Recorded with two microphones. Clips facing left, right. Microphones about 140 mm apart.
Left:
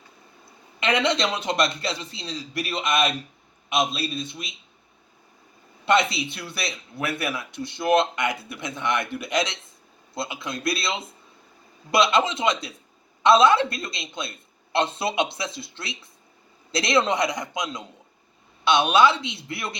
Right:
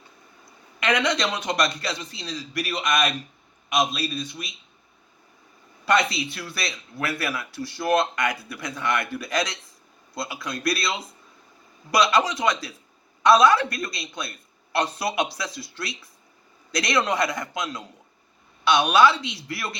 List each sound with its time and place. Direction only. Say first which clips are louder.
0.8 s speech: left 1 dB; 25° left (ahead or behind)
5.8 s speech: left 1 dB; 25° left (ahead or behind)